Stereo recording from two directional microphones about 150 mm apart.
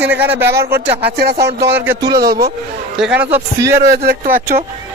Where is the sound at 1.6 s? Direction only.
15° right (ahead or behind).